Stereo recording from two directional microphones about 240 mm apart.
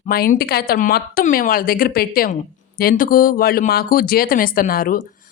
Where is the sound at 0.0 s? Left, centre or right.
Left.